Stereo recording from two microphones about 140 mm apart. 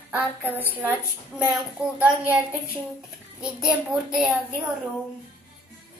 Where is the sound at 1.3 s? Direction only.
5° right (ahead or behind).